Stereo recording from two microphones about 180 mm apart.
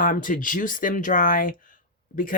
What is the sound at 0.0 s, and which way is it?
Speech, 50° left (ahead or behind).